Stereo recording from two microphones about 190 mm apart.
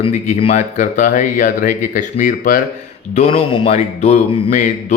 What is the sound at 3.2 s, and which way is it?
Speech, 30° left (ahead or behind).